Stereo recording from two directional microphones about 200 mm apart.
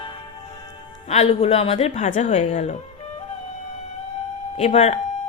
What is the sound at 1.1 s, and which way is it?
Speech, 30° left (ahead or behind).